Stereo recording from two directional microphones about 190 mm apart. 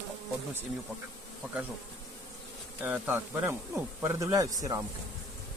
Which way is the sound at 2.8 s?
5° right (ahead or behind).